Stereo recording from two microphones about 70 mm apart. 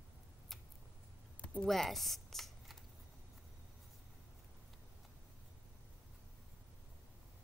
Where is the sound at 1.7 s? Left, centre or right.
Centre.